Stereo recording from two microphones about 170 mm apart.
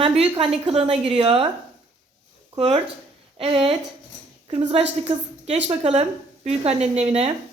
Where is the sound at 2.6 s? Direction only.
35° right (ahead or behind).